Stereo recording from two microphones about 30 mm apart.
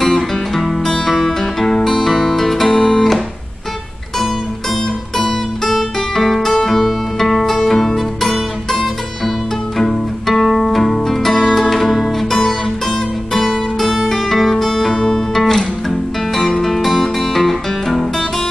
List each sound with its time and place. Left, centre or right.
0.0 s music: centre
2.7 s music: left
5.6 s music: centre
6.8 s music: centre
9.8 s music: centre
14.7 s music: left
15.3 s music: centre